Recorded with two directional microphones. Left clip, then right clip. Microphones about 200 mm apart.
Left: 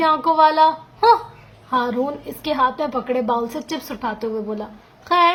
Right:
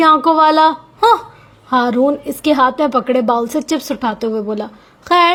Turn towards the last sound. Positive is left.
turn(degrees=-40)  # may be behind; listen again after turning